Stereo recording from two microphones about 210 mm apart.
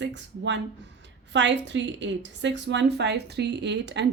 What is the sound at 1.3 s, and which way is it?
A woman's voice, 60° right (ahead or behind).